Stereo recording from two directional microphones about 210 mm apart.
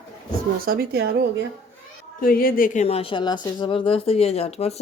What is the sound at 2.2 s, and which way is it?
Speech, 40° left (ahead or behind).